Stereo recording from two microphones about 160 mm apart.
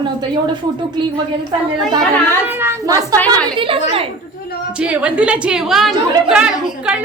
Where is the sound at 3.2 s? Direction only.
10° left (ahead or behind).